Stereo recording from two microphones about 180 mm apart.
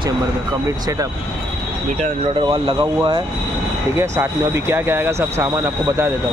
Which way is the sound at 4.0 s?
15° right (ahead or behind).